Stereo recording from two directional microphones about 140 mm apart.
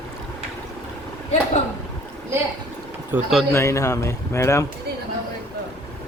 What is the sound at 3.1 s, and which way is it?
Speech, 15° right (ahead or behind).